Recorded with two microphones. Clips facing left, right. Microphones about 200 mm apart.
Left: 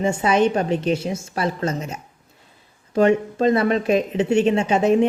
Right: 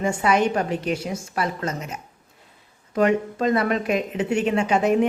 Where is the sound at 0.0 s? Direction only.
25° left (ahead or behind).